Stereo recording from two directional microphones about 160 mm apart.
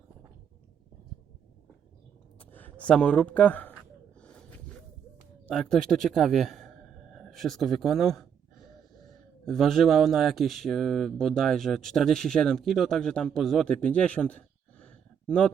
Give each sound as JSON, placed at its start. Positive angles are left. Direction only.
{"t": 2.5, "sound": "speech", "side_deg": 10}
{"t": 5.5, "sound": "speech", "side_deg": 5}
{"t": 9.5, "sound": "speech", "side_deg": 0}